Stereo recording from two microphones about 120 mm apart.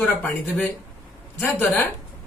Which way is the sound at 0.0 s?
10° left (ahead or behind).